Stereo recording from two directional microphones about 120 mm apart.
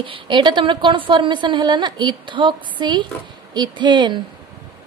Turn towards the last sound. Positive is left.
turn(degrees=-40)  # may be behind; listen again after turning